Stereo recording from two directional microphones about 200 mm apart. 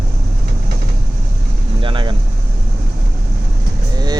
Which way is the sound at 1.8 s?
25° right (ahead or behind).